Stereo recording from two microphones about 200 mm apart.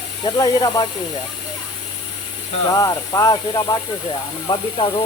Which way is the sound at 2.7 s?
15° left (ahead or behind).